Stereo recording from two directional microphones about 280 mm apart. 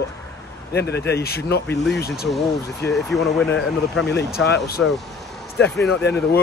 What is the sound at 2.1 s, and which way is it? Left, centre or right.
Speech, centre.